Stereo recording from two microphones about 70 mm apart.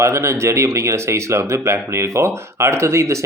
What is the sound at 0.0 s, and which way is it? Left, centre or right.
Speech, right.